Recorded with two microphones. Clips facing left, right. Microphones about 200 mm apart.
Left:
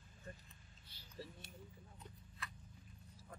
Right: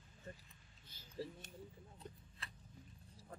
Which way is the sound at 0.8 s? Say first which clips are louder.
Right 6 dB; 45° right (ahead or behind).